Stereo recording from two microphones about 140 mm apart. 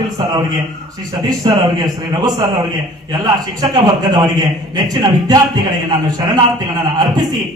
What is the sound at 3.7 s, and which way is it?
A man's voice, 30° right (ahead or behind).